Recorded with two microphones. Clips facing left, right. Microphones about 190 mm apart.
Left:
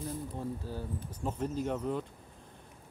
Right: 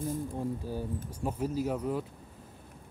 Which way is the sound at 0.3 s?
15° right (ahead or behind).